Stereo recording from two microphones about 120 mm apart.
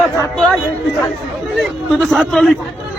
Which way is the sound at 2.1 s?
5° left (ahead or behind).